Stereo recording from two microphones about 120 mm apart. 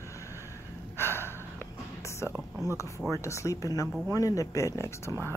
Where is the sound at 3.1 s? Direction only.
25° left (ahead or behind).